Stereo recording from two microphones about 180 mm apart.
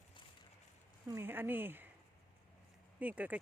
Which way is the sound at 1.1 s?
10° right (ahead or behind).